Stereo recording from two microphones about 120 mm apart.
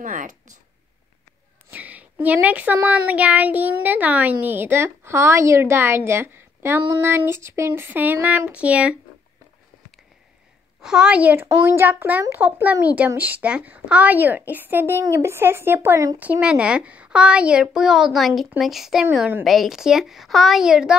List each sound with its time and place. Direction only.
0.0 s speech: 90° right
1.7 s speech: 15° right (ahead or behind)
10.8 s a woman's voice: 5° right (ahead or behind)